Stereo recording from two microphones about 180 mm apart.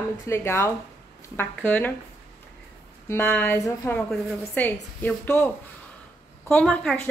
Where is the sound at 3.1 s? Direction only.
10° left (ahead or behind).